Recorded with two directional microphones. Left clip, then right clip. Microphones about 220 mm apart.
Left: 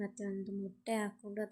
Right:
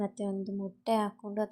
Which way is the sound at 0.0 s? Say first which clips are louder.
Right 7 dB; 15° right (ahead or behind).